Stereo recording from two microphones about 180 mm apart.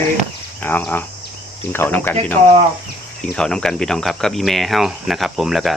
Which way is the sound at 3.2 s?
5° left (ahead or behind).